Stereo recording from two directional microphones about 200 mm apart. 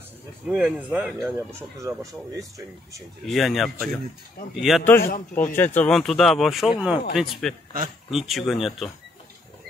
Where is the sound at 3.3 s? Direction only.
Centre (ahead or behind).